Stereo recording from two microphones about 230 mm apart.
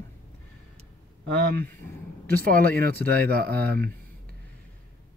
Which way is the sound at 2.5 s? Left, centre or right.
Right.